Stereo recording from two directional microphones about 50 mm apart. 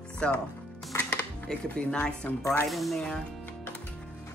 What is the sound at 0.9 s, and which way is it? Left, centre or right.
Music, left.